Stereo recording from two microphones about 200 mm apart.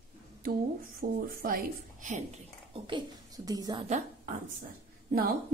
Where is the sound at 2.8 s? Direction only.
20° right (ahead or behind).